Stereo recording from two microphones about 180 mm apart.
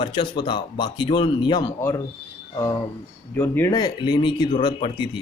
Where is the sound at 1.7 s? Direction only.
15° left (ahead or behind).